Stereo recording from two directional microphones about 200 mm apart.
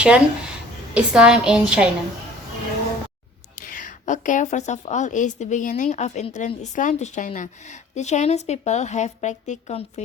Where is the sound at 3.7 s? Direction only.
40° left (ahead or behind).